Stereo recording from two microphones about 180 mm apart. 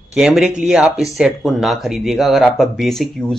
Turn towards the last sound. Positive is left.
turn(degrees=0)  # may be behind; listen again after turning